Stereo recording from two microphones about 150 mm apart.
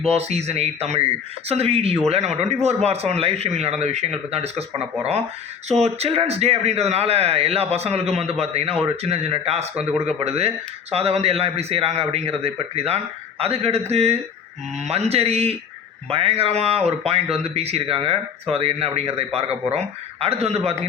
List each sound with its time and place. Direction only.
0.0 s speech: 45° right (ahead or behind)
5.6 s speech: 45° right (ahead or behind)